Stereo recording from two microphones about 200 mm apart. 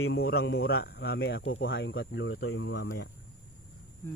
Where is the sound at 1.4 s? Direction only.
75° left (ahead or behind).